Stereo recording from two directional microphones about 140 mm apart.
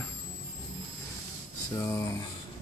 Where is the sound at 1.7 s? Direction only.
25° left (ahead or behind).